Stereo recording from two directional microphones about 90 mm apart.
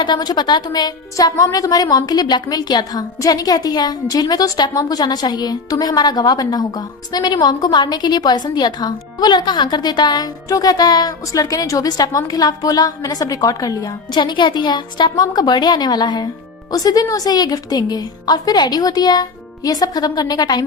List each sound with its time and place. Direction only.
0.0 s a woman's voice: 60° left (ahead or behind)